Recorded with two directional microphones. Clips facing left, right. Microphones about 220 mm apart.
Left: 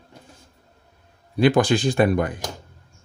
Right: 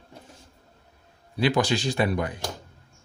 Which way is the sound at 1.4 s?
50° left (ahead or behind).